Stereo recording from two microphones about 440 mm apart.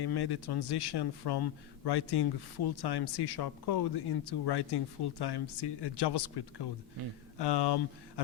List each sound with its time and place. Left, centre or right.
0.0 s a man's voice: left